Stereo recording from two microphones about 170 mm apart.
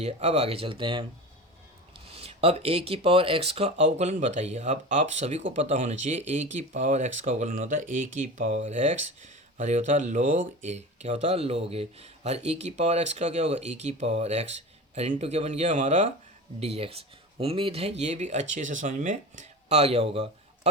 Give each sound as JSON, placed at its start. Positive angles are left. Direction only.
{"t": 0.0, "sound": "speech", "side_deg": -40}
{"t": 2.1, "sound": "speech", "side_deg": -35}